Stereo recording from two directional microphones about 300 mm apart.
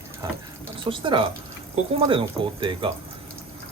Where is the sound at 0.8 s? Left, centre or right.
Centre.